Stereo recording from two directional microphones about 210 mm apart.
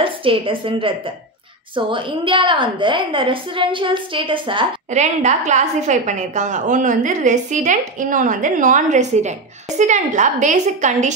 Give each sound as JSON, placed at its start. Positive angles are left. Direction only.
{"t": 0.0, "sound": "a woman's voice", "side_deg": -25}
{"t": 5.0, "sound": "a woman's voice", "side_deg": -35}